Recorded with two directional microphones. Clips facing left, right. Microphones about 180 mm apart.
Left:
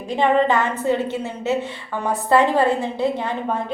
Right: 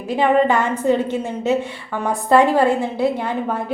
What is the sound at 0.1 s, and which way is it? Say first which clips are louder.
A woman's voice: right 2 dB; 10° right (ahead or behind).